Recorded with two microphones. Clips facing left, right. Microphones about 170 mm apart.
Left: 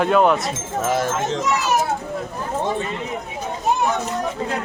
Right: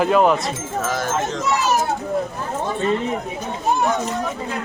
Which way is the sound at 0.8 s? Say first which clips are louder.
Left 2 dB; 25° left (ahead or behind).